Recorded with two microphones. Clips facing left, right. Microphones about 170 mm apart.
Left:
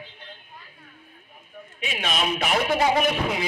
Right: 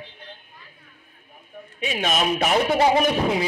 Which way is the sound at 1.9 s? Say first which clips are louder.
Right 4 dB; 45° right (ahead or behind).